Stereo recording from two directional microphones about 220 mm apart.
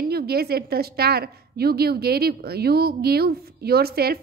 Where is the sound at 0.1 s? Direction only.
45° right (ahead or behind).